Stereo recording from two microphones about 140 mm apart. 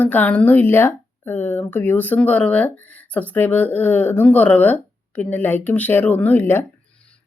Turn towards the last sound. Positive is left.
turn(degrees=15)  # may be behind; listen again after turning